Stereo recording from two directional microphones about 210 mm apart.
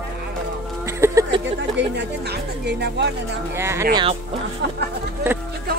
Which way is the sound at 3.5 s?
10° right (ahead or behind).